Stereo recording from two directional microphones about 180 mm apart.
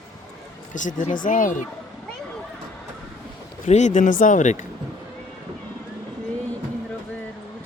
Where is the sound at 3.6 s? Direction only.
40° left (ahead or behind).